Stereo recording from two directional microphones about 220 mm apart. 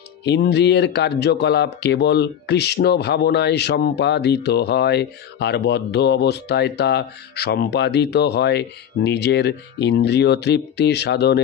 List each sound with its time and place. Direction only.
0.2 s speech: 50° left (ahead or behind)